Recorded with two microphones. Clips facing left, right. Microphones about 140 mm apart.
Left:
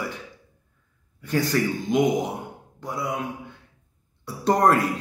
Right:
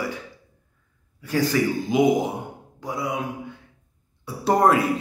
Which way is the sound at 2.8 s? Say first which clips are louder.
Right 1 dB; 5° right (ahead or behind).